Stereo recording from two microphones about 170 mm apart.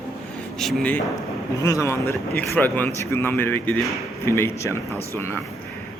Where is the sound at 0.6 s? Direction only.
Centre (ahead or behind).